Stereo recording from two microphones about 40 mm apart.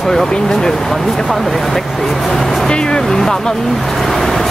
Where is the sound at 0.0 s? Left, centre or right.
Centre.